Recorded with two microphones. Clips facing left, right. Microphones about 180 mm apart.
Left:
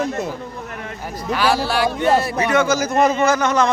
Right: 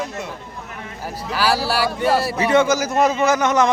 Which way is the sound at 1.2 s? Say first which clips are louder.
Left 2 dB; 5° right (ahead or behind).